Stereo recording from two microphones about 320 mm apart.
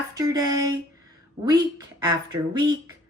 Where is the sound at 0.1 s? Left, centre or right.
Centre.